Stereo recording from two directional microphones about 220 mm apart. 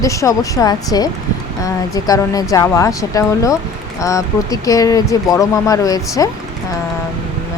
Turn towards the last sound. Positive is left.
turn(degrees=15)  # may be behind; listen again after turning